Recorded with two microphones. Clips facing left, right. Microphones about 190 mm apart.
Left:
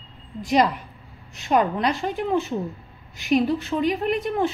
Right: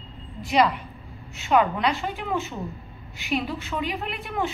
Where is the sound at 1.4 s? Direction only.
40° left (ahead or behind).